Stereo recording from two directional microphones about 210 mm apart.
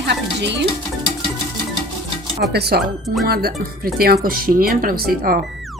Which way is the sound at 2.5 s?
50° right (ahead or behind).